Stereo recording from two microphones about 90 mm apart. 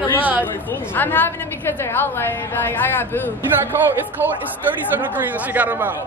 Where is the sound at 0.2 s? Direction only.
20° right (ahead or behind).